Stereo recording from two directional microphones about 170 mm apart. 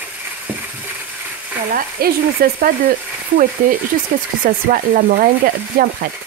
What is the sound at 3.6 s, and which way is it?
Speech, 55° right (ahead or behind).